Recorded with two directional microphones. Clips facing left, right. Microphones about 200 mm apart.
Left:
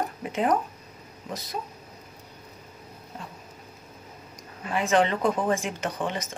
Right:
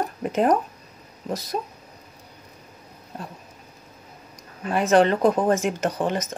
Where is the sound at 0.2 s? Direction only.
45° right (ahead or behind).